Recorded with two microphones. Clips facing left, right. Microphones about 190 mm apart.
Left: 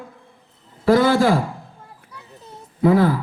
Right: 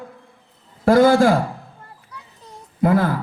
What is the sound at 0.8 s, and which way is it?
Speech, 50° right (ahead or behind).